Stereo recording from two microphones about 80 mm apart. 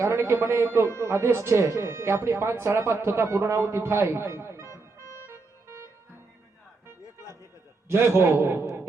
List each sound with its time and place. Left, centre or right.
0.0 s speech: right
5.3 s music: right
7.9 s speech: right